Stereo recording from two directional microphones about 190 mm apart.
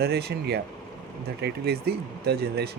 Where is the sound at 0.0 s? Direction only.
60° right (ahead or behind).